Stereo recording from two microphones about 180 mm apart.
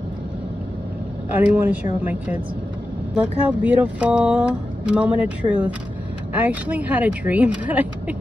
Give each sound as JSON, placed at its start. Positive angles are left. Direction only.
{"t": 1.3, "sound": "speech", "side_deg": -10}